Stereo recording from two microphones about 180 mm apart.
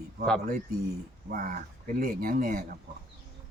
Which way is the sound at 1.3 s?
50° right (ahead or behind).